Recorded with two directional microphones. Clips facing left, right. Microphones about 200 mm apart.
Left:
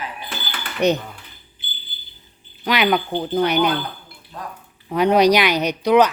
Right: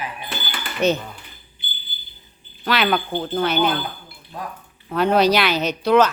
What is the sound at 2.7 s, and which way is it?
Speech, 15° left (ahead or behind).